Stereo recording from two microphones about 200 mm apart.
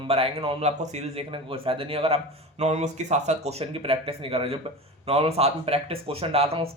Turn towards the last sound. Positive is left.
turn(degrees=-30)  # may be behind; listen again after turning